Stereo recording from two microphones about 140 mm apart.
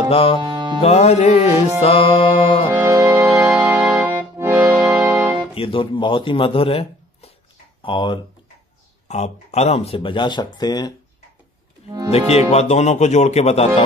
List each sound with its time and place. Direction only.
0.1 s speech: 40° left (ahead or behind)
0.4 s music: 35° right (ahead or behind)
0.8 s music: 50° left (ahead or behind)
2.9 s music: 25° right (ahead or behind)
4.0 s music: 15° right (ahead or behind)
5.5 s speech: 40° left (ahead or behind)
9.0 s speech: 55° left (ahead or behind); by 10.9 s 30° left (ahead or behind)
12.3 s music: 50° left (ahead or behind)